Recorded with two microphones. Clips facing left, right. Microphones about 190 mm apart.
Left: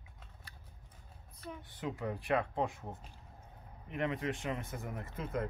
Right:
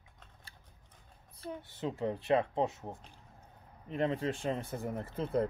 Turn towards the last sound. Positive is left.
turn(degrees=-30)  # may be behind; listen again after turning